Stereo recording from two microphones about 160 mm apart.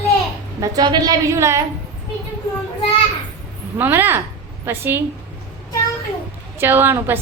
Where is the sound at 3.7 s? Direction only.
10° right (ahead or behind).